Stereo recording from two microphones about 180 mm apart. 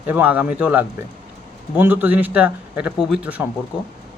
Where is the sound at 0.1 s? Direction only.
10° right (ahead or behind).